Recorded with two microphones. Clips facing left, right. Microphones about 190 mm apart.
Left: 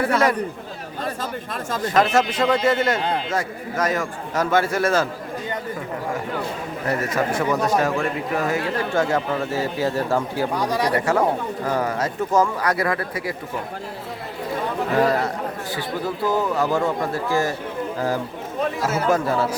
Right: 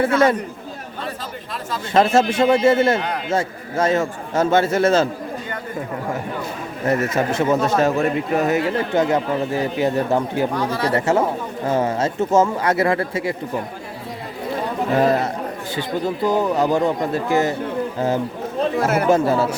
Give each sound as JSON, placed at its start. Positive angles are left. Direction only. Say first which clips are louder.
{"t": 0.0, "sound": "speech", "louder": "right 3 dB", "side_deg": -25}
{"t": 1.8, "sound": "speech", "louder": "right 3 dB", "side_deg": -25}
{"t": 6.8, "sound": "speech", "louder": "right 4 dB", "side_deg": -25}
{"t": 10.5, "sound": "speech", "louder": "even", "side_deg": 15}
{"t": 10.9, "sound": "speech", "louder": "right 4 dB", "side_deg": -25}
{"t": 14.9, "sound": "speech", "louder": "right 2 dB", "side_deg": -20}
{"t": 18.8, "sound": "a man's voice", "louder": "right 7 dB", "side_deg": -60}
{"t": 19.0, "sound": "speech", "louder": "right 2 dB", "side_deg": -25}